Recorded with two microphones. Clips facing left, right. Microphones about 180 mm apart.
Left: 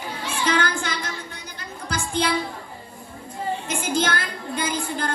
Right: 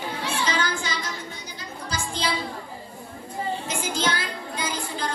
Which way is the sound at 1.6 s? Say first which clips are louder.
Left 2 dB; 55° left (ahead or behind).